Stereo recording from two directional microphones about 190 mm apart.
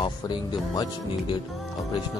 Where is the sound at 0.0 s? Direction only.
25° left (ahead or behind).